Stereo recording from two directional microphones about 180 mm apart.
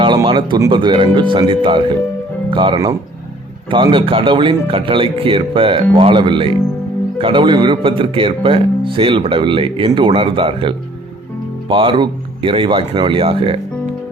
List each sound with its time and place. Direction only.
0.0 s speech: 25° right (ahead or behind)